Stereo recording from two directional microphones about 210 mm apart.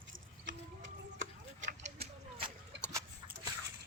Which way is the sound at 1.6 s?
30° right (ahead or behind).